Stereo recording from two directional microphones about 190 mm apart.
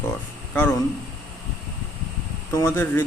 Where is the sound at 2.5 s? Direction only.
10° left (ahead or behind).